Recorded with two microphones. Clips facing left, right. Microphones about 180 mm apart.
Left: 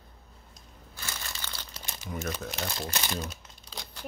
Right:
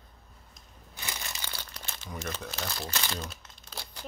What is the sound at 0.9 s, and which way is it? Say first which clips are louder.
Crushing: right 1 dB; 15° right (ahead or behind).